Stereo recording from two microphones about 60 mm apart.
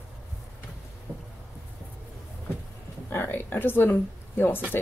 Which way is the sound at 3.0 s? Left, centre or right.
Left.